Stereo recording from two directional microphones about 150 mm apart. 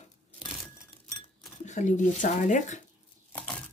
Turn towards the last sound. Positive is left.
turn(degrees=10)  # may be behind; listen again after turning